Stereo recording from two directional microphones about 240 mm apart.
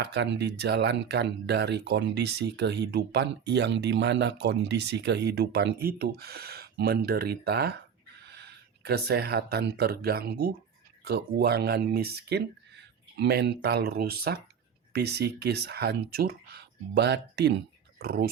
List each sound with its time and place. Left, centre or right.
0.0 s speech: right